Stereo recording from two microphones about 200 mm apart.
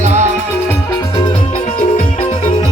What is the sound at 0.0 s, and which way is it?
Music, 35° right (ahead or behind).